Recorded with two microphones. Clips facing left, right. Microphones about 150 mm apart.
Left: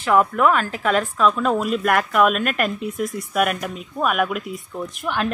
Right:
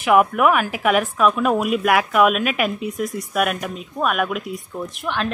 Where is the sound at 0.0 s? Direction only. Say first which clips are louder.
Right 2 dB; 15° right (ahead or behind).